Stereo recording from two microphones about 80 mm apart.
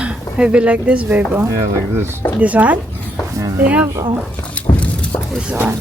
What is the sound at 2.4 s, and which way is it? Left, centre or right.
Speech, centre.